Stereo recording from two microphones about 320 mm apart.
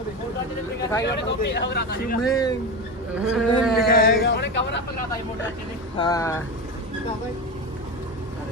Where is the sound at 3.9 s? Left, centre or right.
Left.